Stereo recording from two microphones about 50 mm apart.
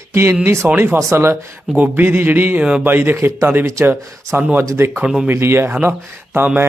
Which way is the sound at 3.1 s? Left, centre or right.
Right.